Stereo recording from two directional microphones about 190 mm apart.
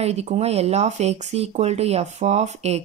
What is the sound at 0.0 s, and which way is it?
Speech, 35° right (ahead or behind).